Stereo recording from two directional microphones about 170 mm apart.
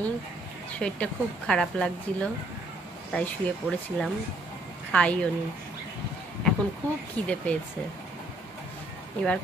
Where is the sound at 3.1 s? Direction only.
10° left (ahead or behind).